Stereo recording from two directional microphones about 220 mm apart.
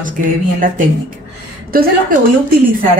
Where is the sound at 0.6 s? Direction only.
40° right (ahead or behind).